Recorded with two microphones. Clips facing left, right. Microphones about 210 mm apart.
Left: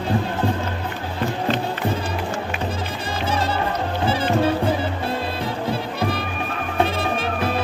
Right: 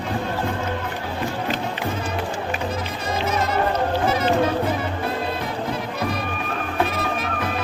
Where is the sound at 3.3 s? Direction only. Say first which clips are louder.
Left 2 dB; 30° left (ahead or behind).